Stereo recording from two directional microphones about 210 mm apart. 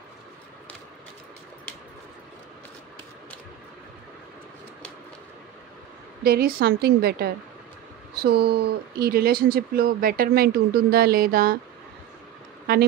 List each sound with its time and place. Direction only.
6.2 s speech: 45° right (ahead or behind)